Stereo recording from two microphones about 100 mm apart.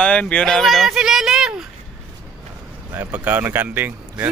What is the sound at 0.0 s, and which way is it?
Speech, 10° left (ahead or behind).